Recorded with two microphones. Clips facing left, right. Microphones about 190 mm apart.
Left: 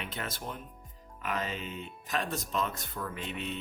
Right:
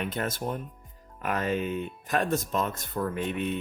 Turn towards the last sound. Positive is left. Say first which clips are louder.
# right 8 dB
turn(degrees=-55)  # may be behind; listen again after turning